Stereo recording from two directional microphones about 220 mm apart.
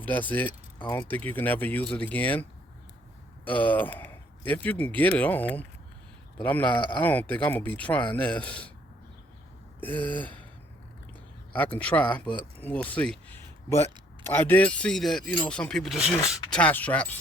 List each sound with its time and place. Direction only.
0.0 s speech: 5° left (ahead or behind)
0.8 s speech: 20° left (ahead or behind)
1.0 s speech: 5° left (ahead or behind)
9.8 s speech: 5° left (ahead or behind)
11.5 s speech: 5° left (ahead or behind)